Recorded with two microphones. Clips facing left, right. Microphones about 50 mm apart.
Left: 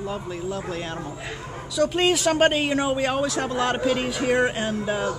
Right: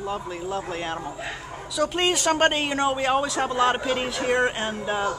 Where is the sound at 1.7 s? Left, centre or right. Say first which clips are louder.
Left 2 dB; centre.